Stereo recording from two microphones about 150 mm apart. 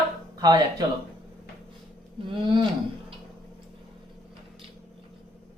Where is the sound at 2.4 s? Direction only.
30° right (ahead or behind).